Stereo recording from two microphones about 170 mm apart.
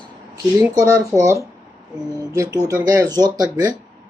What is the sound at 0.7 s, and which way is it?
Speech, 20° right (ahead or behind).